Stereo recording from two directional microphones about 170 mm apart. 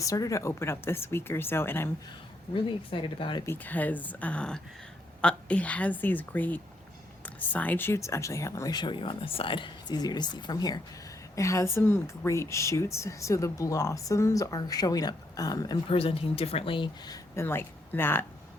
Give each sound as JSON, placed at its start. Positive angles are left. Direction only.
{"t": 0.0, "sound": "speech", "side_deg": 20}
{"t": 2.6, "sound": "speech", "side_deg": 30}
{"t": 3.4, "sound": "speech", "side_deg": 10}
{"t": 17.3, "sound": "speech", "side_deg": 15}